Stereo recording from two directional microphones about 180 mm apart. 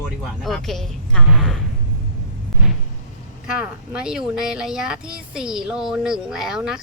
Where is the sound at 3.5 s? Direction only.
5° right (ahead or behind).